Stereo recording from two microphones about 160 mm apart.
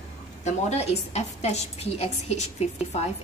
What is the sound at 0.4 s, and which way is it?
A woman's voice, 45° left (ahead or behind).